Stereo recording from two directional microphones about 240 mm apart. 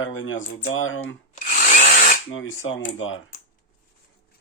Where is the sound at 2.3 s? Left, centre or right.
Left.